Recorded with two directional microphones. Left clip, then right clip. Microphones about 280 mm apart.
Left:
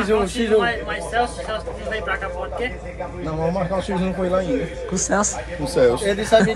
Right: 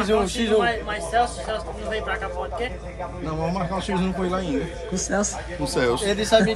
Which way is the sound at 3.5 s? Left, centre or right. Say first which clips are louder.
Left 3 dB; right.